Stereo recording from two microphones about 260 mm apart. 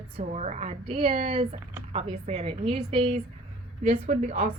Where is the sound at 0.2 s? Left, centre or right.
Right.